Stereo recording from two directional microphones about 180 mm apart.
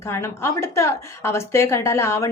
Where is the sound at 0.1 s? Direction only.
15° left (ahead or behind).